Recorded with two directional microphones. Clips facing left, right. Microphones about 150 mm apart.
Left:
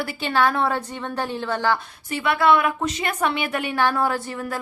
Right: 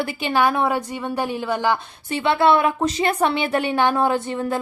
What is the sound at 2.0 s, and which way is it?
Speech, 25° right (ahead or behind).